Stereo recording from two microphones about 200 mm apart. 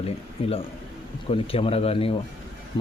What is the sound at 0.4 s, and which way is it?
Speech, 25° left (ahead or behind).